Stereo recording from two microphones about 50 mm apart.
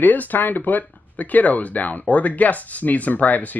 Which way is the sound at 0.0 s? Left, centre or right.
Left.